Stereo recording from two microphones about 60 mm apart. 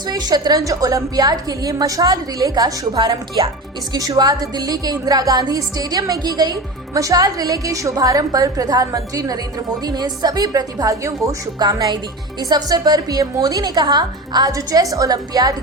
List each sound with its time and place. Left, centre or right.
0.1 s a woman's voice: right
6.9 s a woman's voice: right
12.4 s speech: right